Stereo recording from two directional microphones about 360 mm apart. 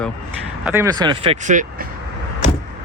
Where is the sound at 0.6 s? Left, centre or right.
Centre.